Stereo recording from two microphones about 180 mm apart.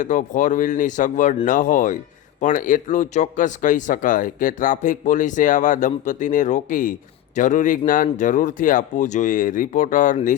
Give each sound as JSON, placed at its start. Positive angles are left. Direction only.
{"t": 0.0, "sound": "a man's voice", "side_deg": 45}